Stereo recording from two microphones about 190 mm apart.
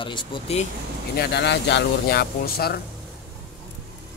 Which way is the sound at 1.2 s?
60° left (ahead or behind).